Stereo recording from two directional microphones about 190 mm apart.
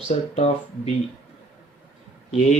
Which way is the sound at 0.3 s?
30° left (ahead or behind).